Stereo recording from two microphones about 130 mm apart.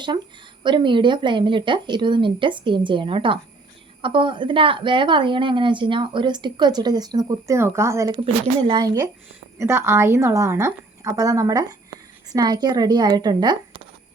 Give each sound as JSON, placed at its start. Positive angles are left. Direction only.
{"t": 0.6, "sound": "a woman's voice", "side_deg": -35}
{"t": 8.1, "sound": "a woman's voice", "side_deg": -40}
{"t": 8.8, "sound": "a woman's voice", "side_deg": -30}
{"t": 9.6, "sound": "a woman's voice", "side_deg": -20}